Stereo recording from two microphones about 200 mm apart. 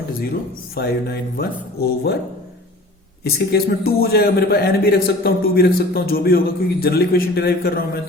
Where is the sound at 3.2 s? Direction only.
50° left (ahead or behind).